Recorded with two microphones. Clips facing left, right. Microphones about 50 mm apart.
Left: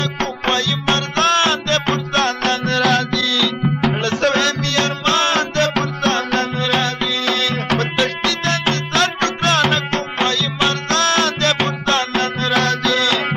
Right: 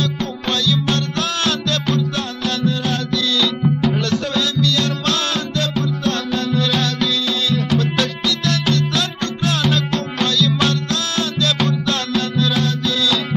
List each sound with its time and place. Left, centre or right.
0.5 s music: left
2.1 s music: left
3.9 s music: left
4.2 s music: left
5.0 s music: left
7.2 s music: left
10.9 s music: left
11.6 s music: left